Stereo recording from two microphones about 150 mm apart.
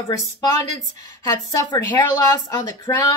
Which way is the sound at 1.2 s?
25° left (ahead or behind).